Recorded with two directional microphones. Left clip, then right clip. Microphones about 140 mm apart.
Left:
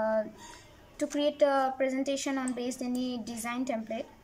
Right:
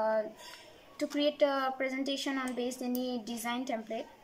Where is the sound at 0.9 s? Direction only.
20° left (ahead or behind).